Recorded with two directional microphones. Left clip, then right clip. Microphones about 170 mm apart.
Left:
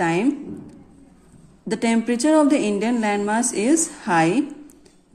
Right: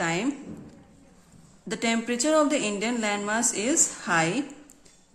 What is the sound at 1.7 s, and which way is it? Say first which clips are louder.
A woman's voice: left 5 dB; 20° left (ahead or behind).